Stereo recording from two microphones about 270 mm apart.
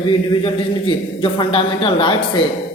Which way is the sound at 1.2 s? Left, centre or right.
Centre.